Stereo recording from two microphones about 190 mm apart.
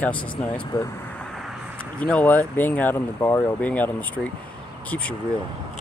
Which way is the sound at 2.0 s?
10° left (ahead or behind).